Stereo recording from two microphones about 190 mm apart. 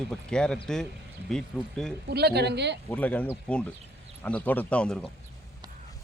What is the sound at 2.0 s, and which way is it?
Speech, 60° right (ahead or behind).